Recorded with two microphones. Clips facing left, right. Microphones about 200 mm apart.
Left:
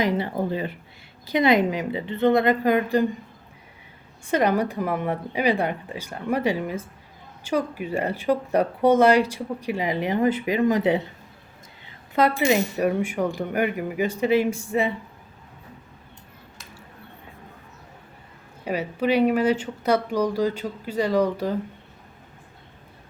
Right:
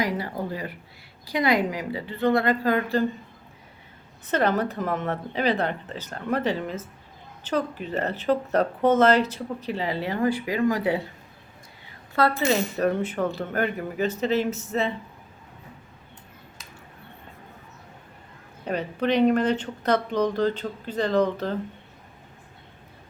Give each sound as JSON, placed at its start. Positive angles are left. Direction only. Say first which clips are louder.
{"t": 0.0, "sound": "a woman's voice", "louder": "left 4 dB", "side_deg": 25}
{"t": 4.3, "sound": "speech", "louder": "left 2 dB", "side_deg": 10}
{"t": 12.4, "sound": "speech", "louder": "left 2 dB", "side_deg": 15}
{"t": 18.6, "sound": "speech", "louder": "left 1 dB", "side_deg": 10}